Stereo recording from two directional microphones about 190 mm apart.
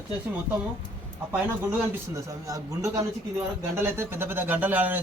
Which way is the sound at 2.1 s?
15° right (ahead or behind).